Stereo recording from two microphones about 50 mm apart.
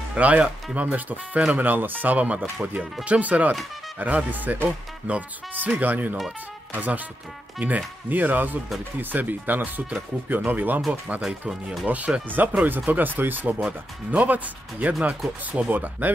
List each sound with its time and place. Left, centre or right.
0.1 s speech: right
12.4 s speech: right